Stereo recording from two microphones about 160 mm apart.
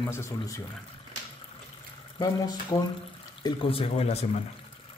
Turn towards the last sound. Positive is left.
turn(degrees=40)  # may be behind; listen again after turning